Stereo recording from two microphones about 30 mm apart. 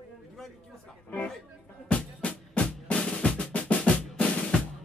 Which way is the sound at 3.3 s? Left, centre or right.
Left.